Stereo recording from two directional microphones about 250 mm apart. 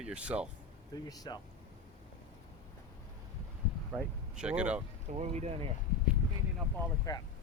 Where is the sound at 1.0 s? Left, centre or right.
Centre.